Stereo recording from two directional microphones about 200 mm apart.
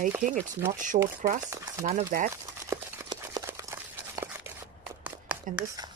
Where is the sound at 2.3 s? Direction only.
15° right (ahead or behind).